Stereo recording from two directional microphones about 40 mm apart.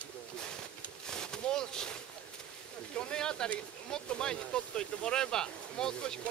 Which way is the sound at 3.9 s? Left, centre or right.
Centre.